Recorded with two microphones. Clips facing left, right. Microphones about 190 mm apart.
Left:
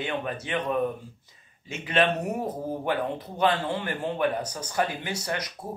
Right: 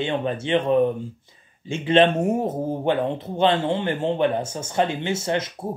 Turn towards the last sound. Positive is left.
turn(degrees=-25)  # may be behind; listen again after turning